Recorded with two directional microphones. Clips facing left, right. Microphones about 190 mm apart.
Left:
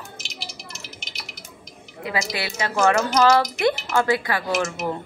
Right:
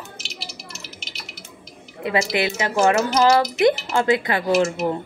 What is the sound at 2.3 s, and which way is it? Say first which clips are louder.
A woman's voice: right 4 dB; 15° right (ahead or behind).